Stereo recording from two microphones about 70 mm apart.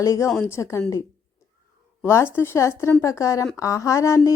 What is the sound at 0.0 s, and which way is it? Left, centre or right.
Speech, left.